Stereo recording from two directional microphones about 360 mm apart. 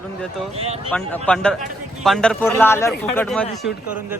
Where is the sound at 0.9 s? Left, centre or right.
Centre.